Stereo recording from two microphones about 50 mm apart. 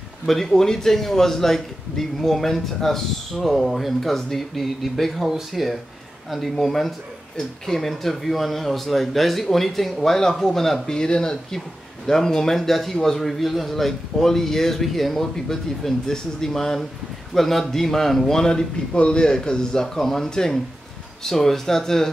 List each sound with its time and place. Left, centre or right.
0.3 s a man's voice: centre